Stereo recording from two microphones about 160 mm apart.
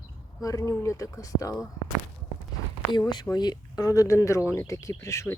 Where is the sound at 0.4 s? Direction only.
20° left (ahead or behind).